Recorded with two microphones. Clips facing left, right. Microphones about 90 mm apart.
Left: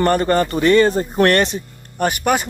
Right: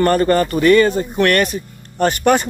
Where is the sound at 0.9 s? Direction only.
35° left (ahead or behind).